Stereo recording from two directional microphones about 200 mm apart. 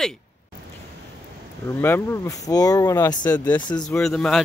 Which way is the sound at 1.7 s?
10° left (ahead or behind).